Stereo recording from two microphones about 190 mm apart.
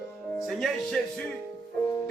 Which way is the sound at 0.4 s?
Centre (ahead or behind).